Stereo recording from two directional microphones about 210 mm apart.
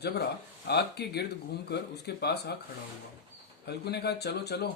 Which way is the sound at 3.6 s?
50° left (ahead or behind).